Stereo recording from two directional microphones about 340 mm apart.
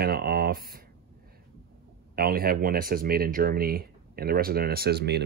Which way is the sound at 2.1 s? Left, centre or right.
Right.